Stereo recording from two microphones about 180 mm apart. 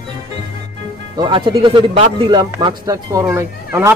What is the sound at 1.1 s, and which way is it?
Speech, 25° right (ahead or behind).